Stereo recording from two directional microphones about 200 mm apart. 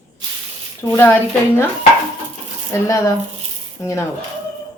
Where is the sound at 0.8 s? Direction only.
10° left (ahead or behind).